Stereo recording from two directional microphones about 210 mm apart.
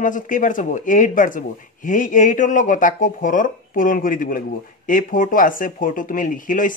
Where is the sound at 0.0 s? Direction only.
40° left (ahead or behind).